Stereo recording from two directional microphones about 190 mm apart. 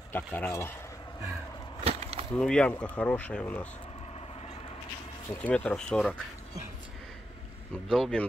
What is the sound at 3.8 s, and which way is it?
Vehicle, 30° left (ahead or behind).